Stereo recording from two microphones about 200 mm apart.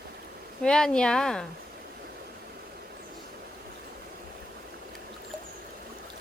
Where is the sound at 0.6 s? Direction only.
5° left (ahead or behind).